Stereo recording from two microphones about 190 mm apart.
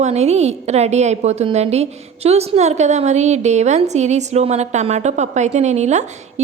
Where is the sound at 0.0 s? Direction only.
35° right (ahead or behind).